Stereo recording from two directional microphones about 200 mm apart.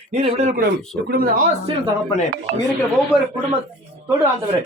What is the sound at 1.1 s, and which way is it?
Speech, 50° right (ahead or behind).